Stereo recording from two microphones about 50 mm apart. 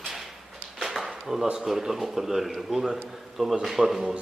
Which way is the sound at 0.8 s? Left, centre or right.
Centre.